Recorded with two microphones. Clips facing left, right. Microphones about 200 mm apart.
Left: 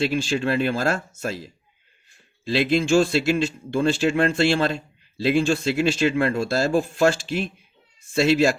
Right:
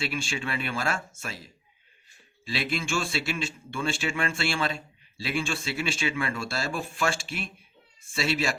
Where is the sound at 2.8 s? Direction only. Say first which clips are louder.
Left 11 dB; 40° left (ahead or behind).